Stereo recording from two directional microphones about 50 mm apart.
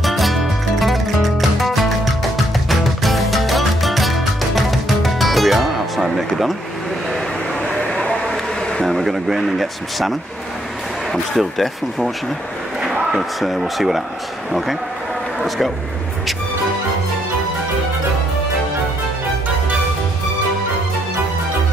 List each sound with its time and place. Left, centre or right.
0.0 s music: centre
7.9 s a sound: centre
8.8 s speech: centre
13.1 s speech: centre
15.4 s speech: centre